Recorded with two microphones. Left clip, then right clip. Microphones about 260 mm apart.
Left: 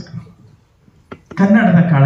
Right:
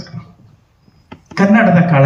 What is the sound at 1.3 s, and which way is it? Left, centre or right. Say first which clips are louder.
Speech: right 3 dB; right.